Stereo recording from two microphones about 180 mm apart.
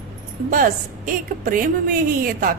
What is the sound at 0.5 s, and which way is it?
A woman's voice, 50° right (ahead or behind).